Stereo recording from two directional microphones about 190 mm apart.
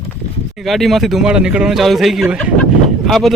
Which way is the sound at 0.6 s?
Centre (ahead or behind).